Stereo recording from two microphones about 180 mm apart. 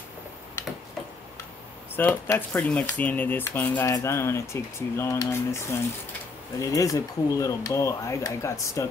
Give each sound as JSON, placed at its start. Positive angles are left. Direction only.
{"t": 2.0, "sound": "speech", "side_deg": 10}